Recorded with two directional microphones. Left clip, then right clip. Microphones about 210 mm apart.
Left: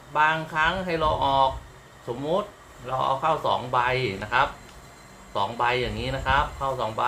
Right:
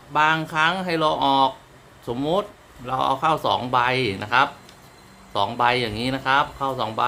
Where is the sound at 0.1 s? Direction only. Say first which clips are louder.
Right 3 dB; 55° right (ahead or behind).